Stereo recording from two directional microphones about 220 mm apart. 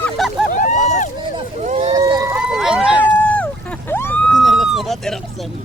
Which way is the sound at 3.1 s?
5° left (ahead or behind).